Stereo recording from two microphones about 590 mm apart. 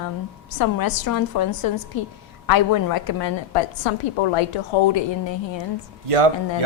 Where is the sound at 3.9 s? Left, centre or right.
Left.